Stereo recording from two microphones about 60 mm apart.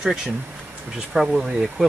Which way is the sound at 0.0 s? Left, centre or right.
Centre.